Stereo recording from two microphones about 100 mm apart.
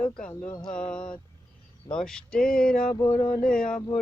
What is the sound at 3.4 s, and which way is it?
Speech, 5° left (ahead or behind).